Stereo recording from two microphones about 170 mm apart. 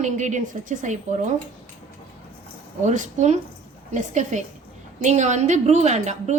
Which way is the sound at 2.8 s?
45° right (ahead or behind).